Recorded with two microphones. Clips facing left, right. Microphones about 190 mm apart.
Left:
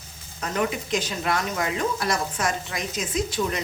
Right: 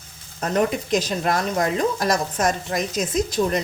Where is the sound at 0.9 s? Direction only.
40° right (ahead or behind).